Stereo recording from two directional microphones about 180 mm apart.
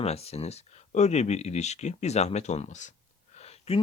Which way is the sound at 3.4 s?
35° left (ahead or behind).